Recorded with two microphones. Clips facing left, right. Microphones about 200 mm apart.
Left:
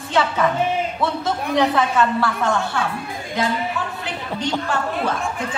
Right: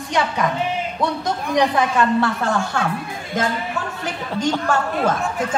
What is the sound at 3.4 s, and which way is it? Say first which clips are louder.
Speech: even; 45° right (ahead or behind).